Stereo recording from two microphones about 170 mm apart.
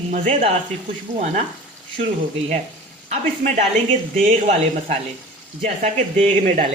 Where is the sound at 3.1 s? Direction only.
40° right (ahead or behind).